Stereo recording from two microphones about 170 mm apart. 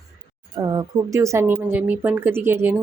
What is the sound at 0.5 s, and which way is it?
A woman's voice, 25° right (ahead or behind).